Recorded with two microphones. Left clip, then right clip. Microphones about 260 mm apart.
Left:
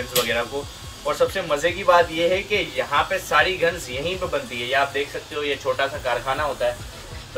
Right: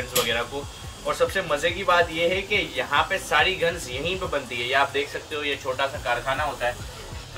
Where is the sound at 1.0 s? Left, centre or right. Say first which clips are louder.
Left 2 dB; centre.